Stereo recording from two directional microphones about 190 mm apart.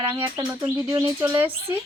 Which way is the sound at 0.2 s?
25° right (ahead or behind).